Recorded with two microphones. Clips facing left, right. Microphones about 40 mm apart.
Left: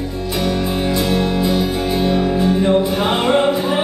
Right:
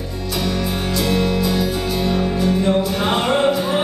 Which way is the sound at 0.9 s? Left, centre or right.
Left.